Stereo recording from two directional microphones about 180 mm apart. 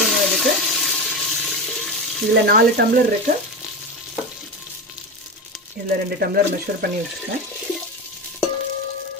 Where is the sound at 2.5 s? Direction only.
65° right (ahead or behind).